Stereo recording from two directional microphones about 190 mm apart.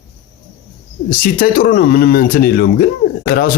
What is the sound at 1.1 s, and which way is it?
Speech, 50° left (ahead or behind).